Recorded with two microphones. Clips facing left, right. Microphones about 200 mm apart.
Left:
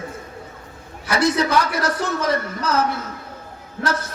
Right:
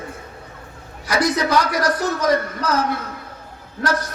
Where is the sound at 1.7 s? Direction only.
25° left (ahead or behind).